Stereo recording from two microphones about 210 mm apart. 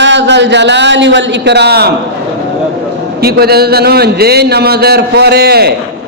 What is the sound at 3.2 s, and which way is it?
A man's voice, 50° right (ahead or behind).